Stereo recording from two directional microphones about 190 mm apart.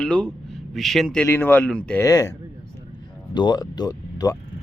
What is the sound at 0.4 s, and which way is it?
A man's voice, centre (ahead or behind).